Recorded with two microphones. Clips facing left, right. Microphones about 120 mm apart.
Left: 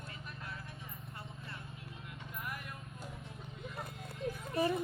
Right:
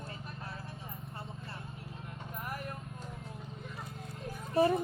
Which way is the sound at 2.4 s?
40° right (ahead or behind).